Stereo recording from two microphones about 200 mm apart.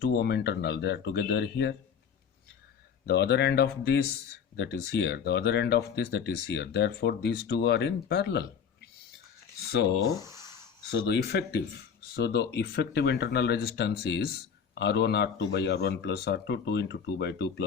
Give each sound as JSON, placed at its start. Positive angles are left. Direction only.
{"t": 0.0, "sound": "speech", "side_deg": 55}
{"t": 3.1, "sound": "speech", "side_deg": 55}
{"t": 10.2, "sound": "a sound", "side_deg": -15}
{"t": 10.9, "sound": "speech", "side_deg": 55}